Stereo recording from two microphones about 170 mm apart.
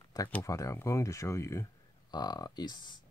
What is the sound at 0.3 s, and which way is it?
Speech, 20° left (ahead or behind).